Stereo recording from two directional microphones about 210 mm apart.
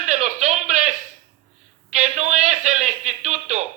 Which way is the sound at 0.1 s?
35° right (ahead or behind).